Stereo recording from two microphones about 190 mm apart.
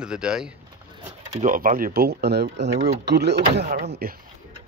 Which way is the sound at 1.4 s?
45° right (ahead or behind).